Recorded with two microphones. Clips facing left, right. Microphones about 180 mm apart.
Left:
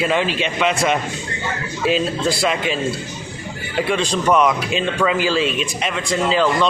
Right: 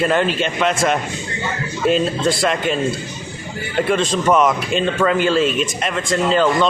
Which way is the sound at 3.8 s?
Centre (ahead or behind).